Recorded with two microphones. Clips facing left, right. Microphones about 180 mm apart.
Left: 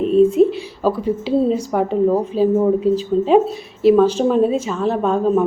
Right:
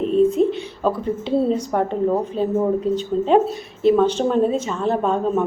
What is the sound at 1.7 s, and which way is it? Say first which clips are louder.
Speech: left 3 dB; 5° left (ahead or behind).